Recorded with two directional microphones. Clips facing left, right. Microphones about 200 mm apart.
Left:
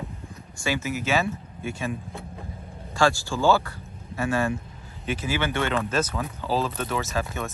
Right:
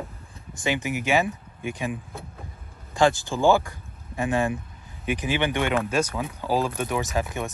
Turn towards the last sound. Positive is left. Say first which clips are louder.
# right 2 dB
turn(degrees=-15)  # may be behind; listen again after turning